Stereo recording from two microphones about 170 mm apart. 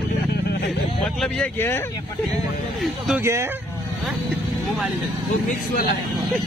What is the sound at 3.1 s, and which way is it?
Speech, 15° right (ahead or behind).